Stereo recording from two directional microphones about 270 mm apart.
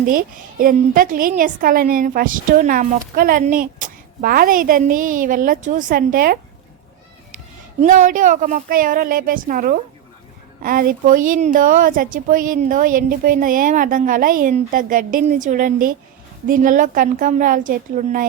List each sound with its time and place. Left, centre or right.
0.0 s a woman's voice: right
7.8 s a woman's voice: right